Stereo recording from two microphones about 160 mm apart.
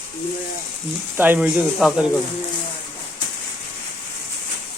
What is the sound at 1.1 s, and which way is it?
Speech, 10° right (ahead or behind).